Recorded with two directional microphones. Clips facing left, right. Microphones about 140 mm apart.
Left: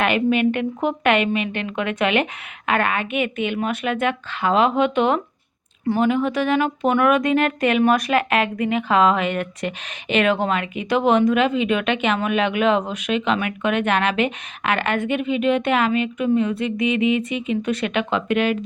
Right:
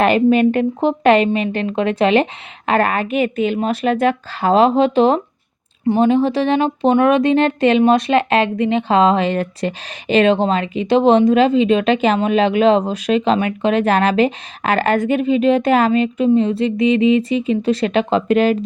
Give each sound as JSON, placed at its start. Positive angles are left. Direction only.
{"t": 0.0, "sound": "speech", "side_deg": -35}